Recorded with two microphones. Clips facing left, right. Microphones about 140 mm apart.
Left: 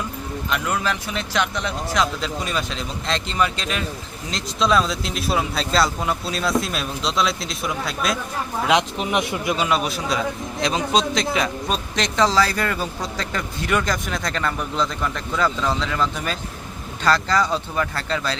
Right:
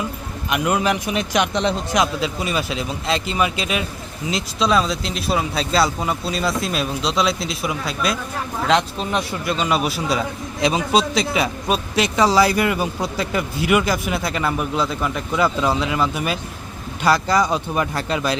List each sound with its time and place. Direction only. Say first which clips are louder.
0.5 s speech: right 5 dB; 20° right (ahead or behind)
2.2 s speech: right 3 dB; 5° right (ahead or behind)
8.6 s speech: right 1 dB; 15° left (ahead or behind)
9.6 s speech: right 2 dB; 5° right (ahead or behind)